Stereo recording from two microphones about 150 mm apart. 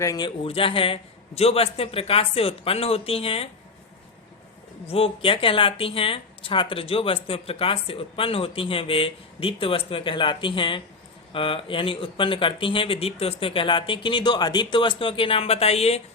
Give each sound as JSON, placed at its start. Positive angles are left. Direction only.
{"t": 0.0, "sound": "speech", "side_deg": 25}
{"t": 4.9, "sound": "speech", "side_deg": 40}